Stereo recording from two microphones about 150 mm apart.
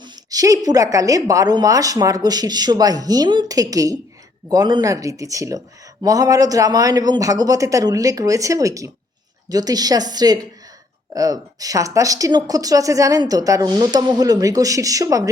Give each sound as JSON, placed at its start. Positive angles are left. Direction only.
{"t": 0.0, "sound": "speech", "side_deg": -25}